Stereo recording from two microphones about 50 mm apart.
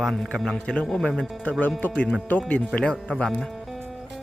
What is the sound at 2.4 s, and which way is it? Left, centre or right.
Speech, left.